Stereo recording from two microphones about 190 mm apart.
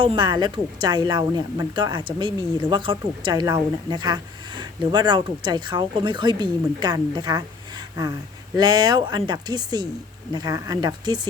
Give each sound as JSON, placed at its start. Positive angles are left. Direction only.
{"t": 0.0, "sound": "a woman's voice", "side_deg": -25}